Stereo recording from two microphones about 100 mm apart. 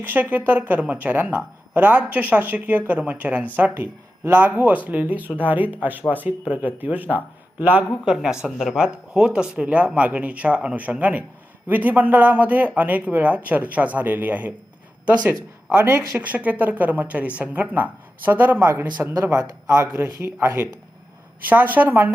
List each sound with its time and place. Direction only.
0.0 s speech: 20° right (ahead or behind)
15.7 s speech: 25° right (ahead or behind)
19.2 s speech: 30° right (ahead or behind)